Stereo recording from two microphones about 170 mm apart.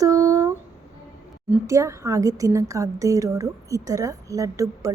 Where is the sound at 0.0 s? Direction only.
20° right (ahead or behind).